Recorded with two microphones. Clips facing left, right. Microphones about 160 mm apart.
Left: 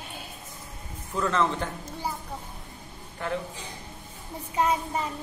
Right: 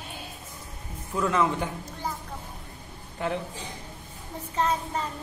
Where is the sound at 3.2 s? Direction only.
20° right (ahead or behind).